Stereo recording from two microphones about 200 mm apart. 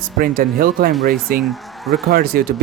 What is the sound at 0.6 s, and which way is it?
Speech, 45° right (ahead or behind).